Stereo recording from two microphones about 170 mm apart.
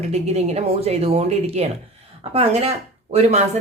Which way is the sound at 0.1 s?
40° right (ahead or behind).